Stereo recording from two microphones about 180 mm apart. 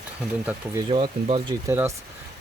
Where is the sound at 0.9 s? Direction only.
30° right (ahead or behind).